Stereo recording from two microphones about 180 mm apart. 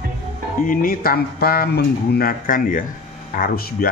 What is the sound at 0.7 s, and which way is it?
Speech, 55° left (ahead or behind).